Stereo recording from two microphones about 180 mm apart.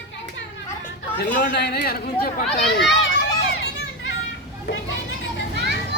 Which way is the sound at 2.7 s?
90° left.